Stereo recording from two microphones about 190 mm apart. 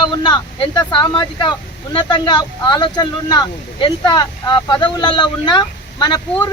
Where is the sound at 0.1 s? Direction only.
25° left (ahead or behind).